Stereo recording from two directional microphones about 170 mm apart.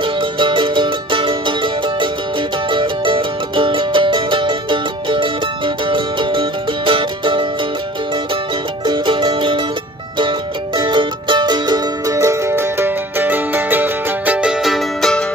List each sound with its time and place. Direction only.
0.0 s music: 30° right (ahead or behind)
8.8 s music: 30° right (ahead or behind)
10.8 s music: 30° right (ahead or behind); by 15.2 s 5° left (ahead or behind)